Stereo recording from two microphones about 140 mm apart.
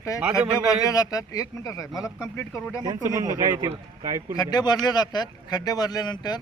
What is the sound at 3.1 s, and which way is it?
Speech, 25° right (ahead or behind).